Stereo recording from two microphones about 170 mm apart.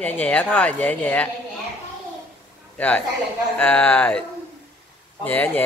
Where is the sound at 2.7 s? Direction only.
10° left (ahead or behind).